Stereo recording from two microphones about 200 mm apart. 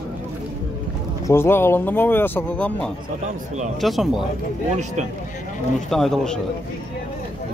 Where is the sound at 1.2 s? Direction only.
10° left (ahead or behind).